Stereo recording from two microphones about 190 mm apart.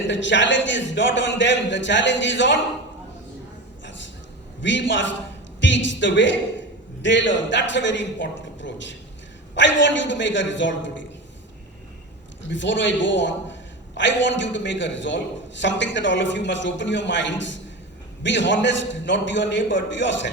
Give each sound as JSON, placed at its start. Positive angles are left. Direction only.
{"t": 0.1, "sound": "a man's voice", "side_deg": 70}
{"t": 4.6, "sound": "a man's voice", "side_deg": 70}
{"t": 12.5, "sound": "a man's voice", "side_deg": 75}